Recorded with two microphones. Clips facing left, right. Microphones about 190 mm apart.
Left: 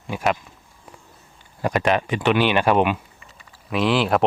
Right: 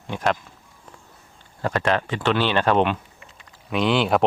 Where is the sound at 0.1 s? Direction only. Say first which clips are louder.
Left 1 dB; 5° left (ahead or behind).